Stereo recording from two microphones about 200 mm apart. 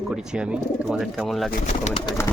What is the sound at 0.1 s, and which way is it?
Speech, 5° right (ahead or behind).